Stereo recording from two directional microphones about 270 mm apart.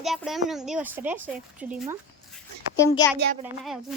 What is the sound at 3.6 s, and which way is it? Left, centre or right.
Speech, centre.